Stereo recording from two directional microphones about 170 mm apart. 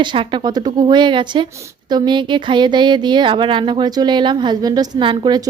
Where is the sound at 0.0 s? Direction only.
30° right (ahead or behind).